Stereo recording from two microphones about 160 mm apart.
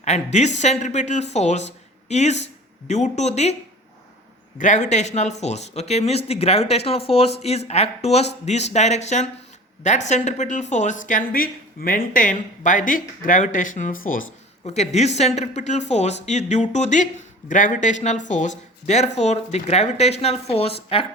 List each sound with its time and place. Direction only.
0.0 s speech: 45° left (ahead or behind)
4.5 s speech: 50° left (ahead or behind)
14.6 s speech: 45° left (ahead or behind)